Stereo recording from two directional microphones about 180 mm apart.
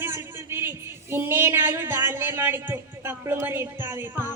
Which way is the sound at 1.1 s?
15° right (ahead or behind).